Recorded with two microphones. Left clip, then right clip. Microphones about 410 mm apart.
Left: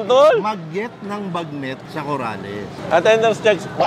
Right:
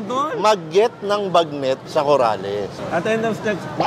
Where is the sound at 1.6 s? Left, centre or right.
Right.